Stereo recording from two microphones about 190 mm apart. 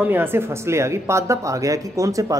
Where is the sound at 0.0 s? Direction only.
10° right (ahead or behind).